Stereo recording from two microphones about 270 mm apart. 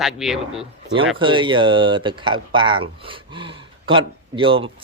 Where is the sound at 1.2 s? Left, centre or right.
Centre.